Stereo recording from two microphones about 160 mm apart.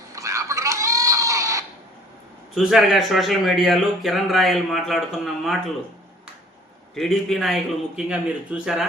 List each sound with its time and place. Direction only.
0.1 s a sound: 20° right (ahead or behind)
2.6 s speech: centre (ahead or behind)
6.9 s speech: centre (ahead or behind)